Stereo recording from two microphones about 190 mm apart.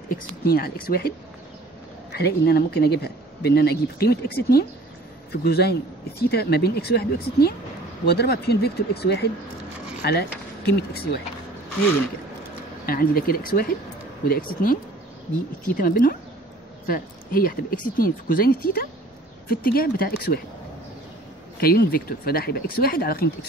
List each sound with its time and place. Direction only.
0.1 s speech: 55° left (ahead or behind)
2.1 s speech: 55° left (ahead or behind)
12.8 s speech: 50° left (ahead or behind)
21.5 s speech: 50° left (ahead or behind)